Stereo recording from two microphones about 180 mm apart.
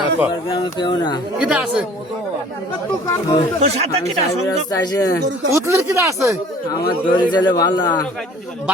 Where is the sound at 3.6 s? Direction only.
35° right (ahead or behind).